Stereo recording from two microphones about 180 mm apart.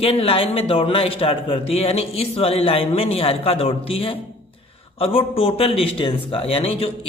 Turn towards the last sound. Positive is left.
turn(degrees=30)  # may be behind; listen again after turning